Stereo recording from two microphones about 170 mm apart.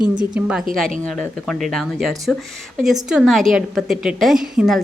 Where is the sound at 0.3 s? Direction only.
5° right (ahead or behind).